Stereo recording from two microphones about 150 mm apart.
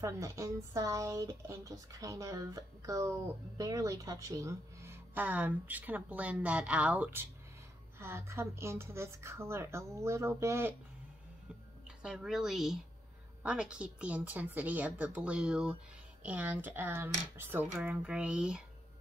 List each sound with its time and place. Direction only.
0.0 s a woman's voice: 20° right (ahead or behind)
12.0 s a woman's voice: 5° right (ahead or behind)